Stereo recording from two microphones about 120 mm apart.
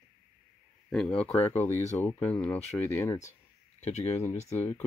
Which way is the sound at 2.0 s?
15° left (ahead or behind).